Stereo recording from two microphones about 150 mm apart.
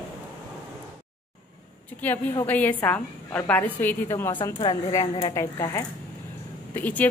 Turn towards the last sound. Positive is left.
turn(degrees=10)  # may be behind; listen again after turning